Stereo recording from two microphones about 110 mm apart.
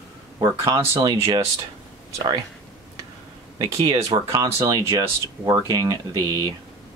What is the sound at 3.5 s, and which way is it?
Speech, 35° right (ahead or behind).